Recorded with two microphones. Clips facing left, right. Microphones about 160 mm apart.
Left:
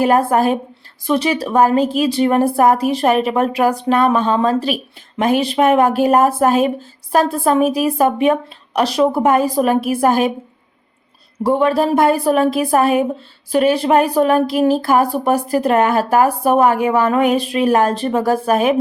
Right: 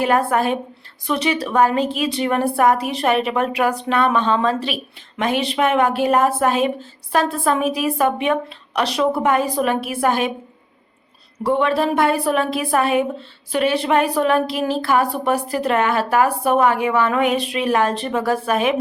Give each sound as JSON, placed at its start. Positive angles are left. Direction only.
{"t": 0.0, "sound": "a woman's voice", "side_deg": 40}
{"t": 11.4, "sound": "a woman's voice", "side_deg": 40}